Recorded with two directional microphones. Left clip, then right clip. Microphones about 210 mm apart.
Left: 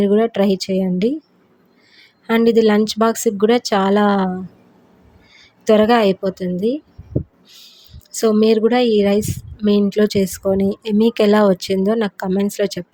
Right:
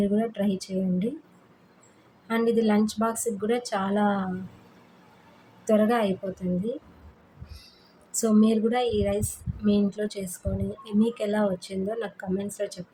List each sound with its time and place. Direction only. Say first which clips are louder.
0.0 s speech: left 12 dB; 45° left (ahead or behind)
2.2 s speech: left 11 dB; 40° left (ahead or behind)
5.6 s speech: left 10 dB; 45° left (ahead or behind)
8.1 s speech: left 10 dB; 40° left (ahead or behind)